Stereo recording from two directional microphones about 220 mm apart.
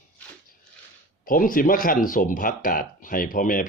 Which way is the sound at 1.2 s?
40° left (ahead or behind).